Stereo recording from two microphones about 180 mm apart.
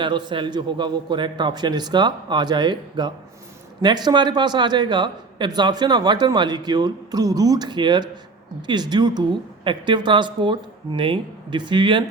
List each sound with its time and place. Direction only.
0.0 s a man's voice: 25° right (ahead or behind)